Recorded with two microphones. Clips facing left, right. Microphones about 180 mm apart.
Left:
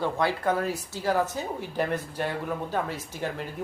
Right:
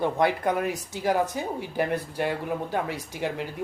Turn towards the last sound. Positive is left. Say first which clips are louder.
# right 2 dB
turn(degrees=-15)  # may be behind; listen again after turning